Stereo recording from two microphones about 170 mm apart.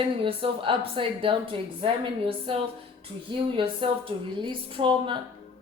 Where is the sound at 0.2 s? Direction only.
30° right (ahead or behind).